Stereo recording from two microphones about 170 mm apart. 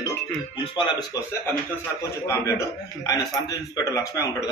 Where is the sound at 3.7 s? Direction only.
20° left (ahead or behind).